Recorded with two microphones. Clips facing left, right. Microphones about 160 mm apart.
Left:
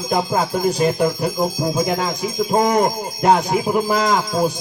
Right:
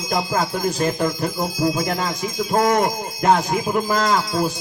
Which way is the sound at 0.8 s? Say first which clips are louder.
Left 2 dB; 10° left (ahead or behind).